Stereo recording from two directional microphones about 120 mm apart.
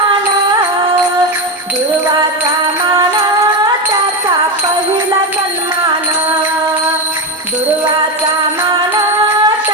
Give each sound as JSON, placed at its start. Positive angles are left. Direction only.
{"t": 9.3, "sound": "music", "side_deg": -30}